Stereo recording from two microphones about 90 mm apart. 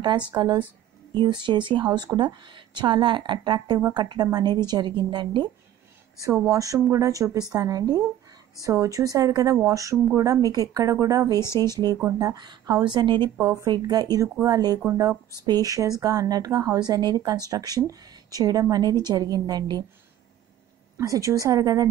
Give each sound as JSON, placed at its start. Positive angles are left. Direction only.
{"t": 0.3, "sound": "a woman's voice", "side_deg": -45}
{"t": 6.1, "sound": "a woman's voice", "side_deg": -40}
{"t": 12.4, "sound": "a woman's voice", "side_deg": -50}
{"t": 13.4, "sound": "speech", "side_deg": -30}
{"t": 13.7, "sound": "a woman's voice", "side_deg": -50}
{"t": 21.0, "sound": "speech", "side_deg": -40}